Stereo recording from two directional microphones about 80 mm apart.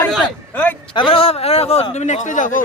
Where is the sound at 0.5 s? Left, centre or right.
Left.